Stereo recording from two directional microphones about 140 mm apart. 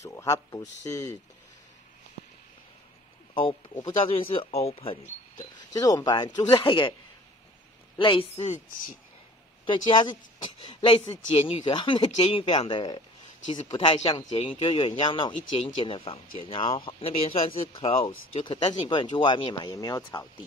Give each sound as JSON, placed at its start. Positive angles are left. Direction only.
{"t": 0.0, "sound": "speech", "side_deg": 20}
{"t": 3.3, "sound": "speech", "side_deg": 40}
{"t": 5.7, "sound": "speech", "side_deg": 25}
{"t": 8.0, "sound": "speech", "side_deg": 40}
{"t": 9.7, "sound": "speech", "side_deg": 35}